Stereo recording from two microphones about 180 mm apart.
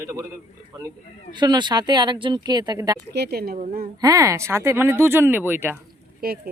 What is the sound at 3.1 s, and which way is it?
Speech, 65° right (ahead or behind).